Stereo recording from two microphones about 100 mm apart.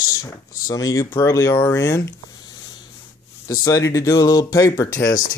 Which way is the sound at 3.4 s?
35° left (ahead or behind).